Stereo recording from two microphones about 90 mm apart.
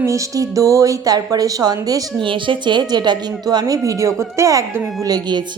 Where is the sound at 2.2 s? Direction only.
65° right (ahead or behind); by 4.8 s 35° right (ahead or behind).